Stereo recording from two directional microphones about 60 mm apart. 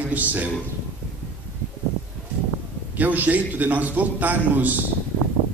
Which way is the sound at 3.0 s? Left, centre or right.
Right.